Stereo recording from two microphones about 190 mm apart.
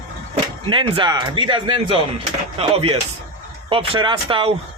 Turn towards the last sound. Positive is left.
turn(degrees=-25)  # may be behind; listen again after turning